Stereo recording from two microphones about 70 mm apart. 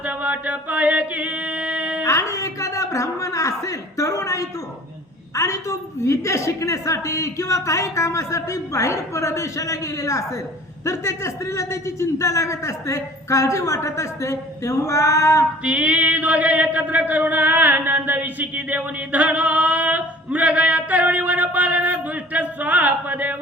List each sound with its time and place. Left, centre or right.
0.0 s a sound: right
2.0 s a woman's voice: left
15.6 s chant: centre